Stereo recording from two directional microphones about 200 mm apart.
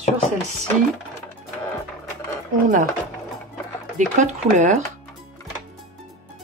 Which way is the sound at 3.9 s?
40° right (ahead or behind).